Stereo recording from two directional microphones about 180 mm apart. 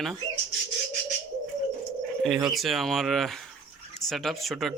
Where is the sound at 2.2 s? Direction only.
Centre (ahead or behind).